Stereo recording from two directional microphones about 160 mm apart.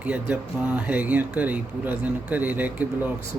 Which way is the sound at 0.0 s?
10° right (ahead or behind).